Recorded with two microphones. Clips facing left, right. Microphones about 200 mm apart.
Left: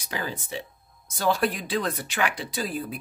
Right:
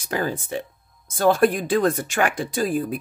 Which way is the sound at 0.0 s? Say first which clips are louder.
Right 7 dB; 50° right (ahead or behind).